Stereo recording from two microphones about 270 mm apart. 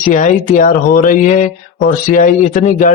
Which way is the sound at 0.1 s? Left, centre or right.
Left.